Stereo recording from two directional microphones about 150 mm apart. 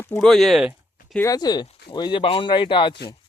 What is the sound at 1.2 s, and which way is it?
Speech, 25° left (ahead or behind).